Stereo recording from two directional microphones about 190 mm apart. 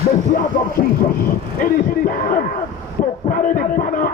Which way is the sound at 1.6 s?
45° left (ahead or behind).